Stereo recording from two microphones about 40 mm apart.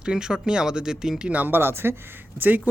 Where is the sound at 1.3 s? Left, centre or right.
Right.